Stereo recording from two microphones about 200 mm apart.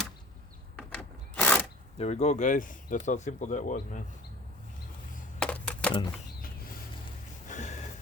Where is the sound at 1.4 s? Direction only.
5° left (ahead or behind).